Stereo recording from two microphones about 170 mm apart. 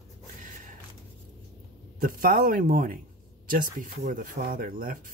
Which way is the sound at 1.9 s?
55° right (ahead or behind).